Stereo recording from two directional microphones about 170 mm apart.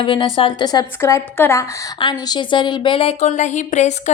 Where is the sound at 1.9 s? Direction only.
25° left (ahead or behind).